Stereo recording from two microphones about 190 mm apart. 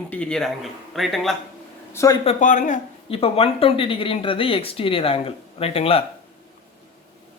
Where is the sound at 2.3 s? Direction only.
40° left (ahead or behind).